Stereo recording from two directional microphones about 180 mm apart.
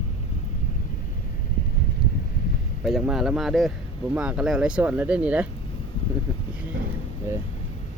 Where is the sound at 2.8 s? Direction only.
Centre (ahead or behind).